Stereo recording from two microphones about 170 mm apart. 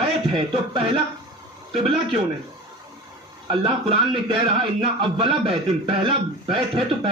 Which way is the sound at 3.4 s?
30° right (ahead or behind).